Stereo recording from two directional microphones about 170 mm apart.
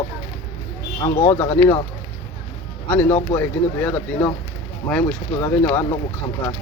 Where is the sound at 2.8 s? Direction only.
10° left (ahead or behind).